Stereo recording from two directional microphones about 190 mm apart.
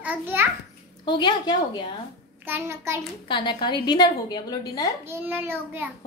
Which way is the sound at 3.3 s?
25° left (ahead or behind).